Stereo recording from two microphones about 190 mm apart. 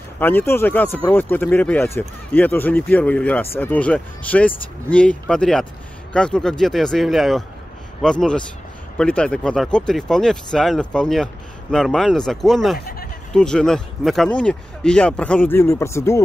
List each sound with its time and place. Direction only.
0.2 s speech: 10° left (ahead or behind)
12.7 s speech: 50° left (ahead or behind)
13.3 s speech: 5° left (ahead or behind)